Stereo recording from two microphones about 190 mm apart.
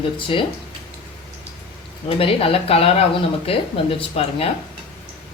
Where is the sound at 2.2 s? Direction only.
30° left (ahead or behind).